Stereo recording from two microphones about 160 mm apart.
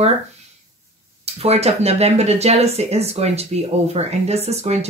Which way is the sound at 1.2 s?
40° right (ahead or behind).